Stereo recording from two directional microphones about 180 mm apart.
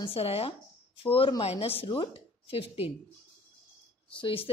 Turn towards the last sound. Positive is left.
turn(degrees=30)  # may be behind; listen again after turning